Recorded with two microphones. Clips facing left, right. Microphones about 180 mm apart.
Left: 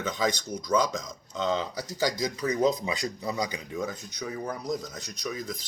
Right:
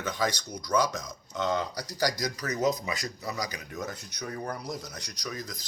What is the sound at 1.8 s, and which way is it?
Speech, 25° left (ahead or behind).